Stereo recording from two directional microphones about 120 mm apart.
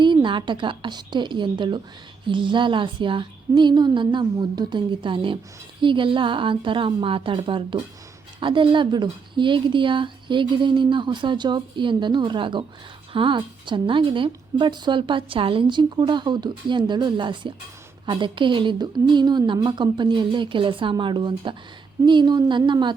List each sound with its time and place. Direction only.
0.0 s a woman's voice: 40° right (ahead or behind)